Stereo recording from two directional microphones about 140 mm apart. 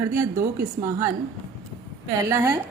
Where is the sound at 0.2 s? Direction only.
20° right (ahead or behind).